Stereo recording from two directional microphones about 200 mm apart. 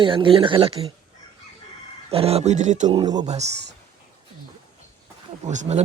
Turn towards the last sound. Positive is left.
turn(degrees=-35)  # may be behind; listen again after turning